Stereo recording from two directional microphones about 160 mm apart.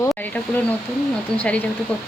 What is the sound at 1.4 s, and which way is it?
Speech, 10° left (ahead or behind).